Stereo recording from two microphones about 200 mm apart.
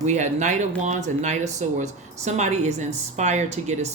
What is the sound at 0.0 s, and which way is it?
Speech, 35° right (ahead or behind).